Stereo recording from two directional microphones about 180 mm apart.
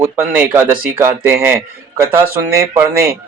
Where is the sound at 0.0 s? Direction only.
10° right (ahead or behind).